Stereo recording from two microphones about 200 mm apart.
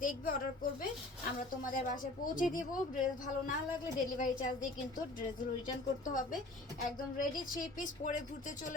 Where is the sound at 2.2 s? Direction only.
40° left (ahead or behind).